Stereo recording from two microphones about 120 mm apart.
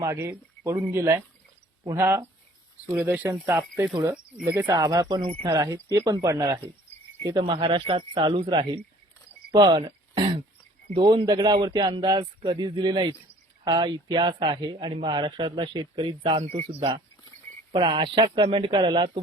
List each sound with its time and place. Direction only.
0.0 s speech: 25° right (ahead or behind)
4.1 s speech: 10° right (ahead or behind)
4.6 s speech: 30° right (ahead or behind)
10.9 s speech: 40° right (ahead or behind)